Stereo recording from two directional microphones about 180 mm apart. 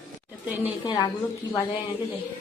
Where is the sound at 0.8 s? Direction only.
25° left (ahead or behind).